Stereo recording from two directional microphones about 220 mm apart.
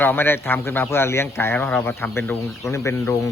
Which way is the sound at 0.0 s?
10° left (ahead or behind).